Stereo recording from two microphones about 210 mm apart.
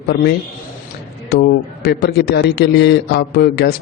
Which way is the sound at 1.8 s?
50° left (ahead or behind).